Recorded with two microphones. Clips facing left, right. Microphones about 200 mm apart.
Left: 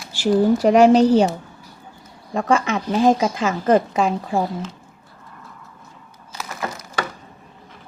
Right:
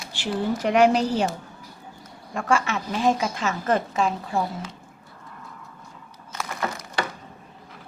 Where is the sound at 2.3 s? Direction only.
35° left (ahead or behind).